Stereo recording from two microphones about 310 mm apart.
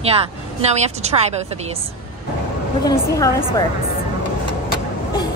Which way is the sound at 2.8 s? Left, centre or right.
Centre.